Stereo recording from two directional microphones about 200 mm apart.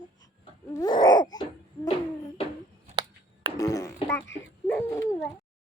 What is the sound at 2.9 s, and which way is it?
Finger snapping, 25° right (ahead or behind).